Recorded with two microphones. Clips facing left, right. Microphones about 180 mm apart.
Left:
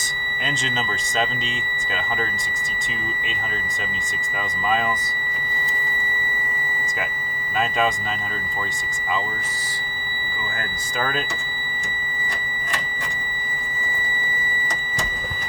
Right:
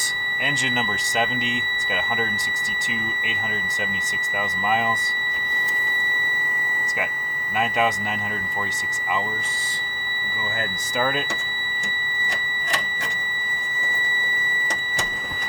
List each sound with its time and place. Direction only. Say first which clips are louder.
0.4 s speech: right 1 dB; 15° right (ahead or behind)
4.4 s speech: even; 15° right (ahead or behind)
7.5 s speech: even; 15° right (ahead or behind)
10.6 s speech: right 3 dB; 15° right (ahead or behind)